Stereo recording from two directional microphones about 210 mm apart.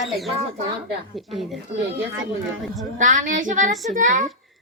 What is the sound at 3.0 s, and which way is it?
A woman's voice, 35° right (ahead or behind).